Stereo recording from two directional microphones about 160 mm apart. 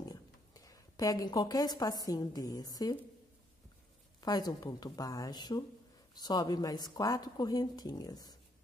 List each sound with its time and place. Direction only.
0.0 s a woman's voice: 25° left (ahead or behind)
4.2 s a woman's voice: 25° left (ahead or behind)